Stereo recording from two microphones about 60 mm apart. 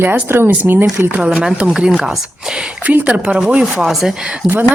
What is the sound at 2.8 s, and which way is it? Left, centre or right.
Speech, right.